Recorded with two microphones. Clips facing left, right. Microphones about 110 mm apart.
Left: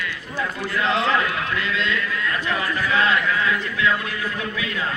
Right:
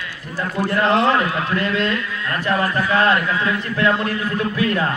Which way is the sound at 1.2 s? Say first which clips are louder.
Right 4 dB; 35° right (ahead or behind).